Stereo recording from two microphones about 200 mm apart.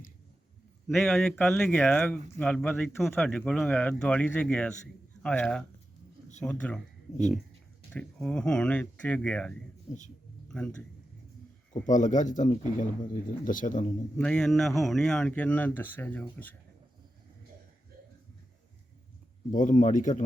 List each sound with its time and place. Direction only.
0.9 s speech: centre (ahead or behind)
7.9 s speech: 5° left (ahead or behind)
11.7 s a man's voice: 40° left (ahead or behind)
14.2 s speech: 5° left (ahead or behind)
19.5 s a man's voice: 40° left (ahead or behind)